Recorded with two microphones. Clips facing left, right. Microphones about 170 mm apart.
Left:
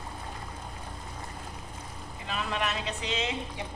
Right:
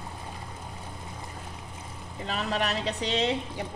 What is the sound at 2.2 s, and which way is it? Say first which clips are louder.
Speech: right 3 dB; 40° right (ahead or behind).